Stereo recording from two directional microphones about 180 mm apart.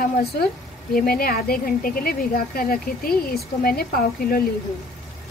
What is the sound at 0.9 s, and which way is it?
Speech, 55° left (ahead or behind).